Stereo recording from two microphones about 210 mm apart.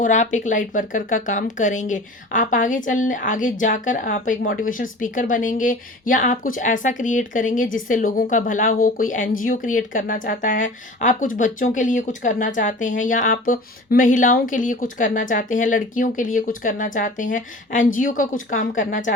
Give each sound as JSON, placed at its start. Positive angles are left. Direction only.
{"t": 0.0, "sound": "speech", "side_deg": 35}